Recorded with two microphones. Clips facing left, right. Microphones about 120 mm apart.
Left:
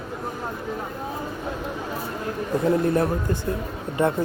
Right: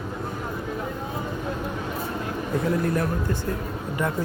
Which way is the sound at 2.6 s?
25° left (ahead or behind).